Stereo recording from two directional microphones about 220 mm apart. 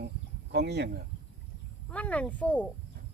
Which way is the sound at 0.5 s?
50° right (ahead or behind).